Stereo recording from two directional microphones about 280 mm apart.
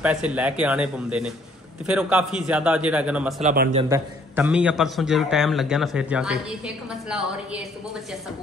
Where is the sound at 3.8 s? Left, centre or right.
Centre.